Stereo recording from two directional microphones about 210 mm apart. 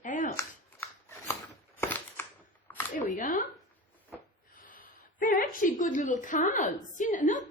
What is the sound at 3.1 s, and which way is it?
Speech, 40° left (ahead or behind).